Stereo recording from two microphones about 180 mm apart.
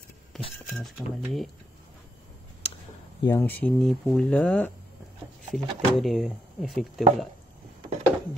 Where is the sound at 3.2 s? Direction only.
15° left (ahead or behind).